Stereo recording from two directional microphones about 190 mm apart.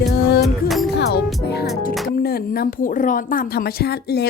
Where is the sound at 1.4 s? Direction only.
55° left (ahead or behind).